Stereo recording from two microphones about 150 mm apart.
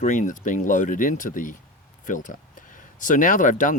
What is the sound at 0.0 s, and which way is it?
Speech, 55° left (ahead or behind).